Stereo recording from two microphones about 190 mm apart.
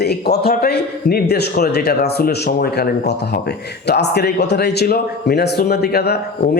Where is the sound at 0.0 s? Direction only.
55° left (ahead or behind).